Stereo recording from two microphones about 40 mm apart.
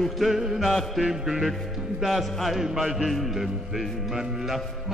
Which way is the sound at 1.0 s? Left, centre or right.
Centre.